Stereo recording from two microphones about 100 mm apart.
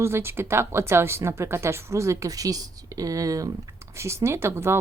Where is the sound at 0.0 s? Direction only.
25° right (ahead or behind).